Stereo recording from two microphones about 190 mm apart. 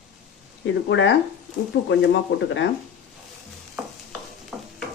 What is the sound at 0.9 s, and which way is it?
Speech, 75° left (ahead or behind).